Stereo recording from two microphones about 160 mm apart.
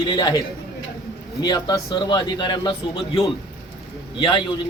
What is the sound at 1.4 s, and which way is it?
A man's voice, 25° left (ahead or behind).